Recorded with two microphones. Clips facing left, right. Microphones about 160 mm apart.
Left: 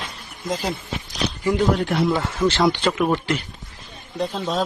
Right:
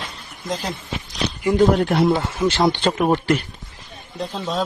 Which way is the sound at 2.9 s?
40° right (ahead or behind).